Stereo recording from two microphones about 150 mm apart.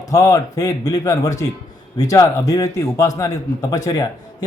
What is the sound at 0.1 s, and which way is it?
Speech, 20° left (ahead or behind).